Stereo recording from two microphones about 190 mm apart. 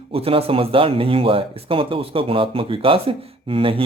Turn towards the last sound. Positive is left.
turn(degrees=-30)  # may be behind; listen again after turning